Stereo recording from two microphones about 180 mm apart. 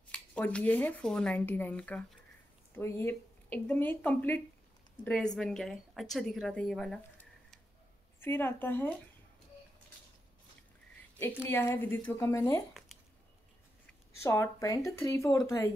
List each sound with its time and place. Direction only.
0.1 s a woman's voice: 5° left (ahead or behind)
8.2 s speech: 10° left (ahead or behind)
11.4 s speech: 15° left (ahead or behind)
14.2 s speech: 15° left (ahead or behind)